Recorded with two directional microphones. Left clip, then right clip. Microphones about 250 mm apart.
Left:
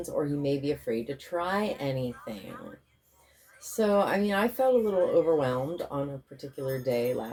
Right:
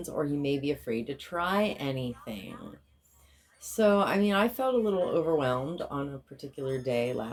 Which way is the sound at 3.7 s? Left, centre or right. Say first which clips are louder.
Even; right.